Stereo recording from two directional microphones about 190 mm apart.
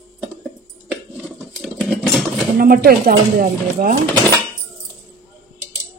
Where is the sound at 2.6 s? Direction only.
50° right (ahead or behind).